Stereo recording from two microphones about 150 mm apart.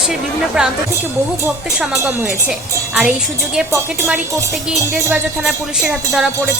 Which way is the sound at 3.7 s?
15° right (ahead or behind).